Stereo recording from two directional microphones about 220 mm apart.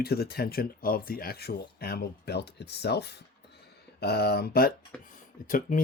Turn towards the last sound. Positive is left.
turn(degrees=40)  # may be behind; listen again after turning